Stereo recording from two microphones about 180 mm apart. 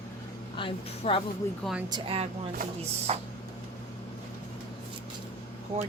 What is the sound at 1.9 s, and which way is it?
Speech, 30° right (ahead or behind).